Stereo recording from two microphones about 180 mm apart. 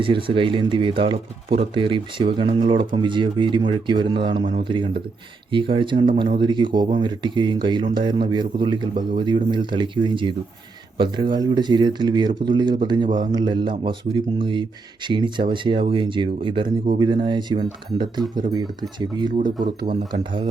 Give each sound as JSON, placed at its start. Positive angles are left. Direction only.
{"t": 0.0, "sound": "speech", "side_deg": -30}